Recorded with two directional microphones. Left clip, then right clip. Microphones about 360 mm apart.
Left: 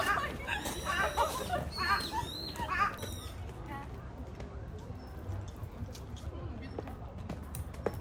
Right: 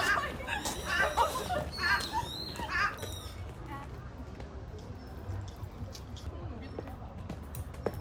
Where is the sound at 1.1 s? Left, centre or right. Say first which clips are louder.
Right 3 dB; centre.